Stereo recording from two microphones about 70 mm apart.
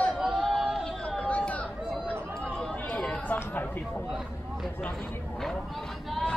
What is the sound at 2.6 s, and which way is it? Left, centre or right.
Chatter, centre.